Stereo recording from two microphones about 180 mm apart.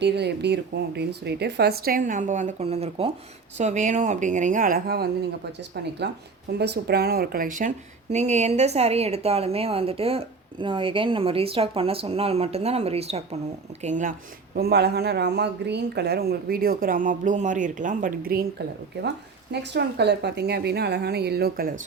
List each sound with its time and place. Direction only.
0.0 s speech: 70° right (ahead or behind)
5.5 s a woman's voice: 70° right (ahead or behind); by 13.2 s 35° right (ahead or behind)
13.8 s speech: 45° right (ahead or behind)
19.0 s speech: 70° right (ahead or behind)